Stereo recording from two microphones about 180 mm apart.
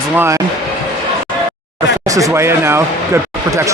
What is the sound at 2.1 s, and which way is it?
Speech, 20° right (ahead or behind).